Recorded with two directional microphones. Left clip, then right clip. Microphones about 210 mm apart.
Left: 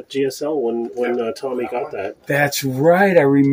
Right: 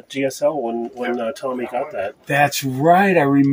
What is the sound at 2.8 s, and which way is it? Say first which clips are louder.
Speech: left 1 dB; 20° right (ahead or behind).